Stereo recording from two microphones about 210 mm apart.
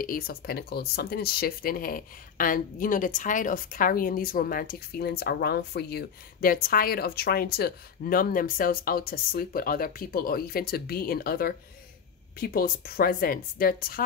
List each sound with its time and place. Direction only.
0.0 s speech: 45° left (ahead or behind)